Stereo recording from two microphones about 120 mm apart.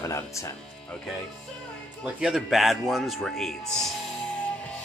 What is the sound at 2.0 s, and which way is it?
A man's voice, 5° right (ahead or behind).